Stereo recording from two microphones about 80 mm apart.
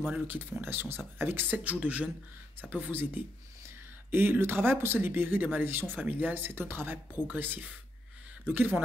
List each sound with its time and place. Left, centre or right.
0.3 s speech: right